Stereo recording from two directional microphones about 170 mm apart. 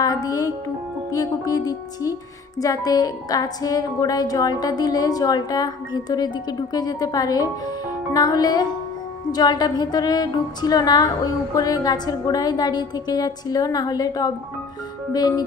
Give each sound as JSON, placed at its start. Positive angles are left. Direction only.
{"t": 0.0, "sound": "music", "side_deg": 20}